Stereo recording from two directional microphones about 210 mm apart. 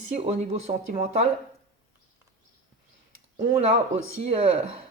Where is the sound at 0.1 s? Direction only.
30° right (ahead or behind).